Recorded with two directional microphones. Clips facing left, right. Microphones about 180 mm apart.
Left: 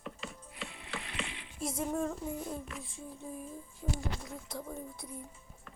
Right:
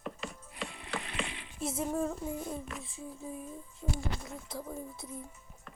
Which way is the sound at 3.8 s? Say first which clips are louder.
Right 1 dB; centre (ahead or behind).